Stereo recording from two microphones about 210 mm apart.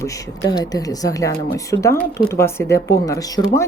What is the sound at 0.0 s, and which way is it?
Speech, 15° left (ahead or behind).